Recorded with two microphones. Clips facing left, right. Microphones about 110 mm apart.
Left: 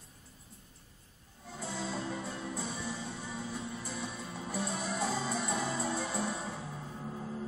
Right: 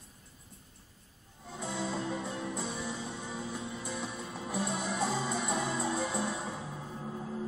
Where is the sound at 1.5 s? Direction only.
20° right (ahead or behind).